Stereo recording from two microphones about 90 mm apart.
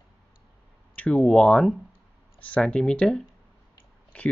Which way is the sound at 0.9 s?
15° left (ahead or behind).